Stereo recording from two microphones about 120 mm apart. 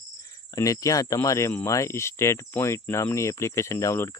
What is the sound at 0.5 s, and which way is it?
Speech, 30° left (ahead or behind).